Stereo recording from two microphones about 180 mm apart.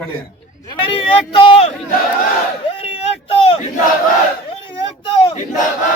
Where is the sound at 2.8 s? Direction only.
30° left (ahead or behind).